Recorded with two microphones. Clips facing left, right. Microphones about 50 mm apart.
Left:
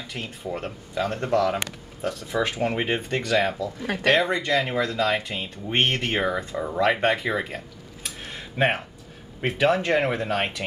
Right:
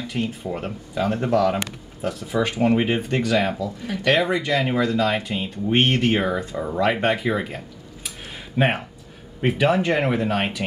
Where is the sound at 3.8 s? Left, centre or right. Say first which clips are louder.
Left 5 dB; left.